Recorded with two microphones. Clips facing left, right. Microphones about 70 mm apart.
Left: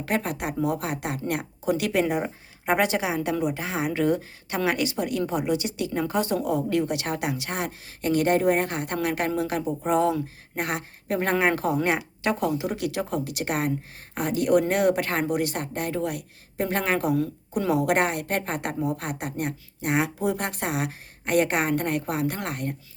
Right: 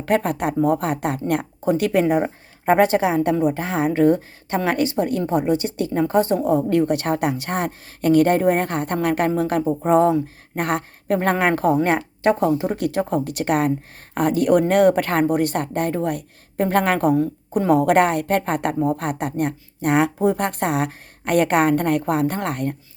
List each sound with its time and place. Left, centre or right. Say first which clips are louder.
0.0 s a woman's voice: right 7 dB; right